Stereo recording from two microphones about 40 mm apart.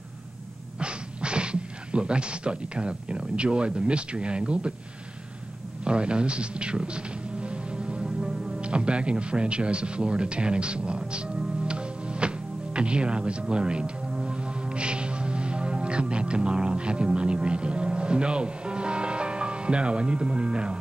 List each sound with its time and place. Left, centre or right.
0.7 s speech: right
5.9 s music: right